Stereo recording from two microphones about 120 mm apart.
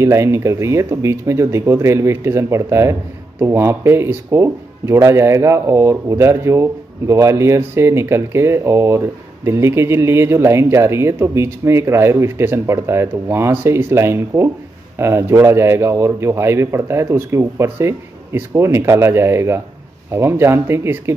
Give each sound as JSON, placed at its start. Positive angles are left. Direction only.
{"t": 0.0, "sound": "speech", "side_deg": -25}